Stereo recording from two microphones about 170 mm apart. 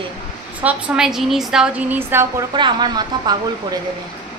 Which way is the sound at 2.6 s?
25° right (ahead or behind).